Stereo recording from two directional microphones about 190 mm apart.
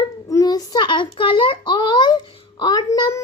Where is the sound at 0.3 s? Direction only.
20° left (ahead or behind).